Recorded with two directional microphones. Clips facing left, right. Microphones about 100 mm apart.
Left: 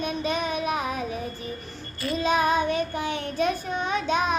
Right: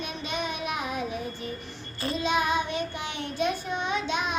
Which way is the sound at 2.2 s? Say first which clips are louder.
Left 4 dB; 40° left (ahead or behind).